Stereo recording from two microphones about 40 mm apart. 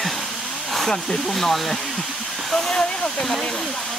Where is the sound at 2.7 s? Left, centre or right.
Centre.